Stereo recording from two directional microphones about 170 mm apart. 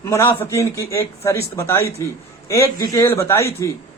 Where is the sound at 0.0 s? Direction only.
15° left (ahead or behind).